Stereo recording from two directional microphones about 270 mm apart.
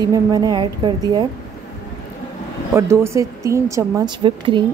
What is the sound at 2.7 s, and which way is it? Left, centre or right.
A woman's voice, centre.